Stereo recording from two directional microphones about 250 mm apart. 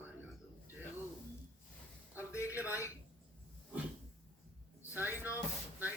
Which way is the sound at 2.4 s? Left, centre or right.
Centre.